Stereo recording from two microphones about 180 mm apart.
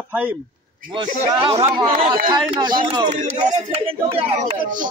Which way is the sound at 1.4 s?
30° right (ahead or behind).